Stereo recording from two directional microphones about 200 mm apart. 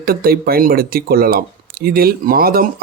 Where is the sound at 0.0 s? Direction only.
50° right (ahead or behind).